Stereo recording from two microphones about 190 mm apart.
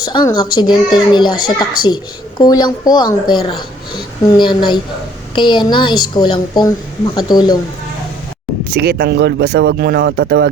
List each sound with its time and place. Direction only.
0.0 s a child's voice: 25° left (ahead or behind)
8.7 s speech: 60° right (ahead or behind)